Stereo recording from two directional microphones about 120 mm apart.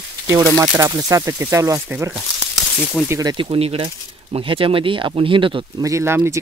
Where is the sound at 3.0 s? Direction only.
20° right (ahead or behind).